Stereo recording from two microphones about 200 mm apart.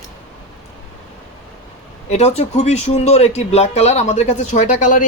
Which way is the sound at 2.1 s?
30° left (ahead or behind).